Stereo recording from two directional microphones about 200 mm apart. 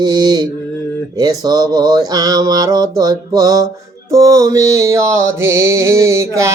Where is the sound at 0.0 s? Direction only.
20° right (ahead or behind).